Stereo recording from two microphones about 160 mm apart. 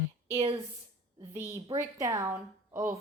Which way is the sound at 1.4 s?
35° right (ahead or behind).